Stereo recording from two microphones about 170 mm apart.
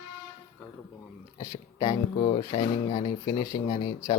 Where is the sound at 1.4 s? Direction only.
25° left (ahead or behind).